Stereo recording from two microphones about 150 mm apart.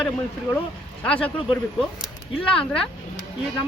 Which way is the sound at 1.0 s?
10° left (ahead or behind).